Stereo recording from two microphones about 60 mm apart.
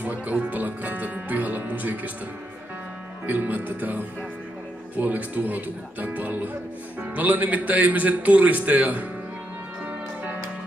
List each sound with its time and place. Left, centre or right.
0.0 s speech: right
3.3 s speech: right